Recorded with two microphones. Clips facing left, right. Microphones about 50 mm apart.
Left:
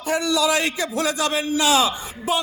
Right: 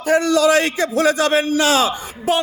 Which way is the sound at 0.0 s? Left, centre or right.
Right.